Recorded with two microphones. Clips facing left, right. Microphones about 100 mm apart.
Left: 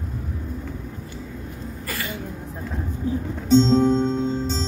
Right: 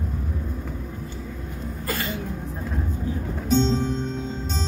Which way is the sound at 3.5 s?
30° left (ahead or behind).